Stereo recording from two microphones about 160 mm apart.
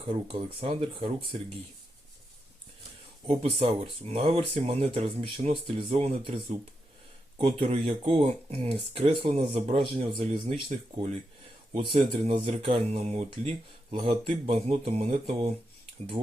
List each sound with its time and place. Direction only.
0.1 s speech: 35° right (ahead or behind)
3.2 s speech: 35° right (ahead or behind)
10.7 s speech: 45° right (ahead or behind)